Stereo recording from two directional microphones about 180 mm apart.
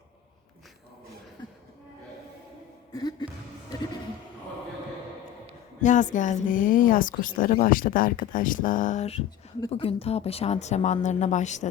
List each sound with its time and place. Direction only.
5.8 s speech: 45° left (ahead or behind)